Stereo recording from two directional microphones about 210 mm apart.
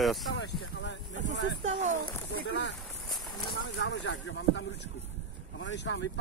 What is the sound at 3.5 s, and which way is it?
Speech, 55° left (ahead or behind).